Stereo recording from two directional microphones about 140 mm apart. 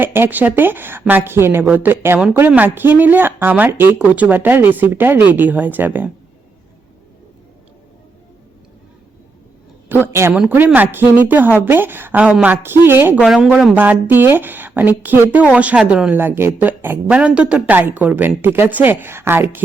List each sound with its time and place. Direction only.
0.0 s speech: 15° right (ahead or behind)
9.9 s speech: 15° right (ahead or behind)
13.2 s speech: 5° right (ahead or behind)